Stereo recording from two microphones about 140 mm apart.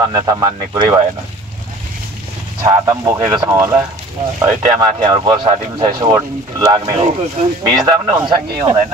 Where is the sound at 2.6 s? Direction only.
20° right (ahead or behind).